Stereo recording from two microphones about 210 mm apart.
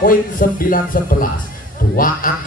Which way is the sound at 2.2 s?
40° left (ahead or behind).